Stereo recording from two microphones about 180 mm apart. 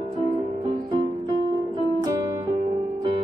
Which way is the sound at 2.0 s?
20° right (ahead or behind).